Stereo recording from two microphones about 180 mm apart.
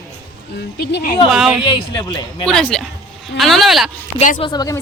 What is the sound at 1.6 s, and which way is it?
Speech, 25° left (ahead or behind).